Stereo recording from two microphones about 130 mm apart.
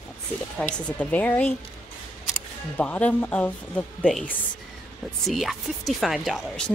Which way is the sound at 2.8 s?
10° left (ahead or behind).